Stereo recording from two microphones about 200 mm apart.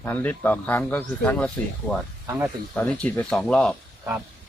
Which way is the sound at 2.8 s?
5° left (ahead or behind).